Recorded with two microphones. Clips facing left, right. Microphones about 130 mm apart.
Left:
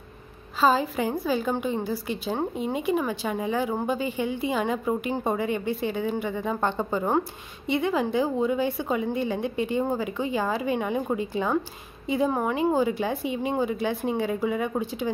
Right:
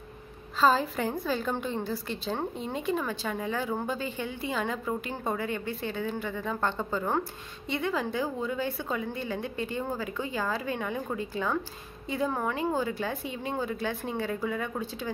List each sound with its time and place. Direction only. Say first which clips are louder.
0.6 s a woman's voice: left 2 dB; 5° left (ahead or behind)